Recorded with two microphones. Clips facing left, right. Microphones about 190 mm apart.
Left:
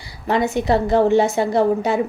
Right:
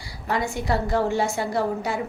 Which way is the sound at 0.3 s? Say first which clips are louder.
Left 7 dB; 20° left (ahead or behind).